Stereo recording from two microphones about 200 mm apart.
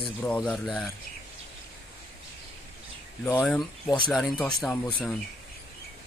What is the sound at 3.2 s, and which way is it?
A man's voice, 5° left (ahead or behind).